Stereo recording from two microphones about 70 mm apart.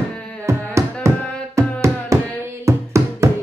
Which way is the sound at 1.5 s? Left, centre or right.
Right.